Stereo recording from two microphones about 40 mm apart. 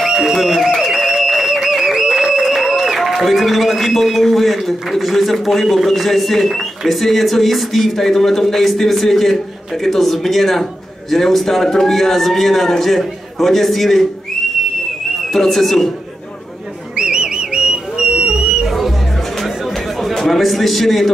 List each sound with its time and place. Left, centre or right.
0.0 s a sound: centre
3.2 s a man's voice: centre
15.3 s a man's voice: centre
16.9 s whistle: right
18.7 s music: centre
20.0 s a sound: centre